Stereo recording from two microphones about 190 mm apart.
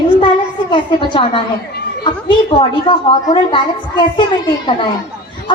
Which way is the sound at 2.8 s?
25° left (ahead or behind).